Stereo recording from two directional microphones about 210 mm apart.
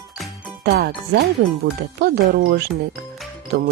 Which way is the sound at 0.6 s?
50° right (ahead or behind).